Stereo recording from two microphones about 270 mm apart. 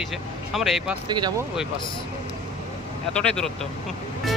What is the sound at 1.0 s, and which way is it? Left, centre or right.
Speech, centre.